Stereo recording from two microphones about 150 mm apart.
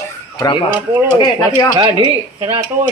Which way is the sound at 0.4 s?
35° left (ahead or behind).